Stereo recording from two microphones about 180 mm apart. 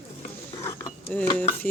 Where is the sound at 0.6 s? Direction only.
15° left (ahead or behind).